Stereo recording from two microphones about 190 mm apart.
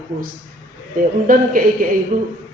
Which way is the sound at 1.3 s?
50° right (ahead or behind).